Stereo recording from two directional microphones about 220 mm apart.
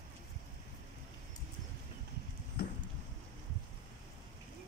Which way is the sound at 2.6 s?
40° left (ahead or behind).